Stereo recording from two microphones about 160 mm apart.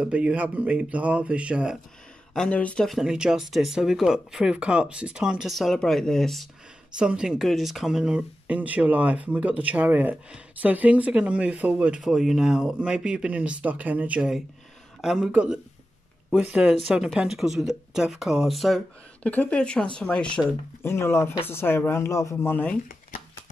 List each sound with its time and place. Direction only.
0.0 s speech: 10° right (ahead or behind)
2.3 s speech: 5° left (ahead or behind)